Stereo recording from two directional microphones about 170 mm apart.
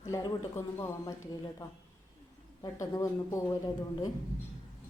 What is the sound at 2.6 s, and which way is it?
Speech, 20° left (ahead or behind).